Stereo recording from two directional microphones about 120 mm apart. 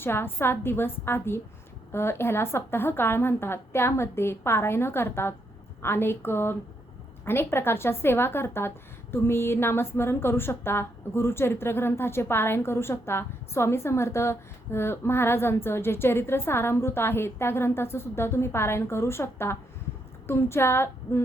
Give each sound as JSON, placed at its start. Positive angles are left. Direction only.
{"t": 0.0, "sound": "a woman's voice", "side_deg": 20}